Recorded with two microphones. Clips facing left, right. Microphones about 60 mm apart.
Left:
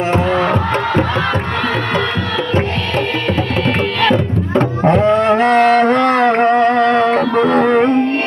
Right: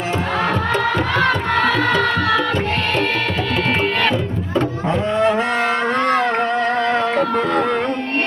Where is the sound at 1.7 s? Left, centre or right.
Left.